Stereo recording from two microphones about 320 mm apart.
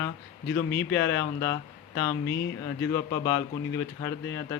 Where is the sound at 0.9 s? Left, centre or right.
Centre.